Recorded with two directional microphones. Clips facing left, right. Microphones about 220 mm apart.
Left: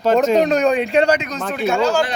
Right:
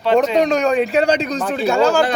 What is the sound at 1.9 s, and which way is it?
Speech, 55° right (ahead or behind).